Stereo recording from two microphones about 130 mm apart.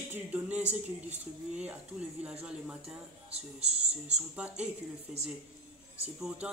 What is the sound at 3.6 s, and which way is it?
Speech, 55° right (ahead or behind).